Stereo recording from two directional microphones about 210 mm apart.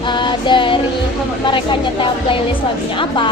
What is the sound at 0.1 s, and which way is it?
Music, 20° left (ahead or behind).